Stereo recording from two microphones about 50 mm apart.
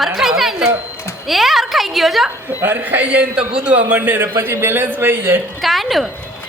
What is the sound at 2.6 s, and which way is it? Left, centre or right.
A man's voice, right.